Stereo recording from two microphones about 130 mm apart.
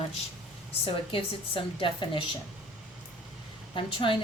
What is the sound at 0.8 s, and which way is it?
A woman's voice, 40° left (ahead or behind).